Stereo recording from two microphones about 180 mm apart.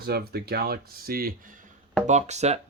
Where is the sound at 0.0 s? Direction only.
60° right (ahead or behind).